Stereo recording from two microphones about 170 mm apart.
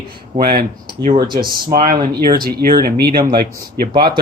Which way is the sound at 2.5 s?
65° right (ahead or behind).